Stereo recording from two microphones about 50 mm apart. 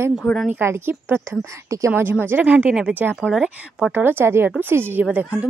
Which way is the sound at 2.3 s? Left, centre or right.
Right.